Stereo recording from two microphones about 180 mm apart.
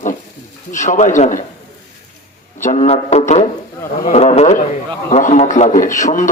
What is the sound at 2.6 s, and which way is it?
A man's voice, 40° left (ahead or behind).